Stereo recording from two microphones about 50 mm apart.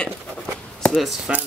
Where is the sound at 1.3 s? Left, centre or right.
Right.